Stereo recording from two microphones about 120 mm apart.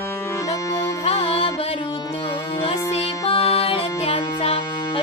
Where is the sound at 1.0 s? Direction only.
55° left (ahead or behind).